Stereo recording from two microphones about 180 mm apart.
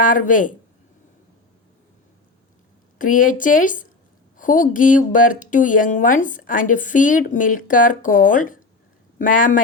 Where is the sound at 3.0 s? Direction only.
45° left (ahead or behind).